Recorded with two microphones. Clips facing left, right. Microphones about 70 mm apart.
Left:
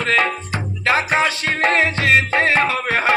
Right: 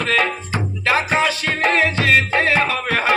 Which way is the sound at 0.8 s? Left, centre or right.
Left.